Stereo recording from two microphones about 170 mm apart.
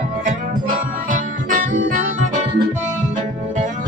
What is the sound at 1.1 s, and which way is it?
Music, 50° right (ahead or behind).